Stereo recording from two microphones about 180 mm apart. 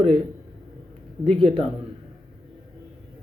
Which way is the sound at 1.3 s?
30° right (ahead or behind).